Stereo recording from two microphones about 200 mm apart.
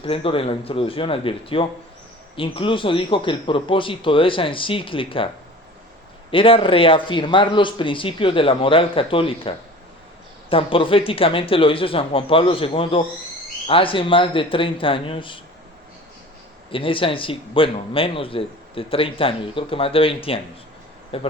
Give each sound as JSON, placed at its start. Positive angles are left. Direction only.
{"t": 0.0, "sound": "speech", "side_deg": 25}
{"t": 6.3, "sound": "speech", "side_deg": 25}
{"t": 16.7, "sound": "speech", "side_deg": 25}